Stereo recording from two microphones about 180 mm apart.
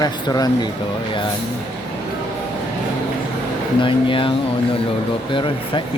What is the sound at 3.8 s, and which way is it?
Mantra, 30° left (ahead or behind).